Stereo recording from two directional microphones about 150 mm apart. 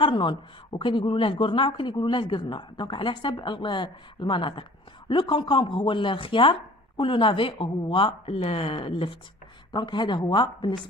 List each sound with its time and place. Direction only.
0.0 s a woman's voice: 35° left (ahead or behind)